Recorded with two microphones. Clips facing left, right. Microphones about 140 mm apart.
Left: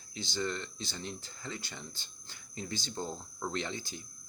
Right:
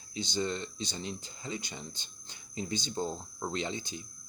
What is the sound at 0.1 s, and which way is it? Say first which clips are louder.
Speech: right 3 dB; 20° right (ahead or behind).